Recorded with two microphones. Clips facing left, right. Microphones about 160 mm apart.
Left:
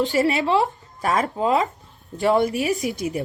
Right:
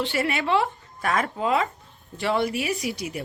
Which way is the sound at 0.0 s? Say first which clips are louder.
Left 5 dB; 40° left (ahead or behind).